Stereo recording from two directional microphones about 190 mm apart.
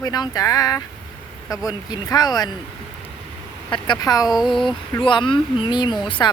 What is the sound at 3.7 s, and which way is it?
Speech, 20° left (ahead or behind).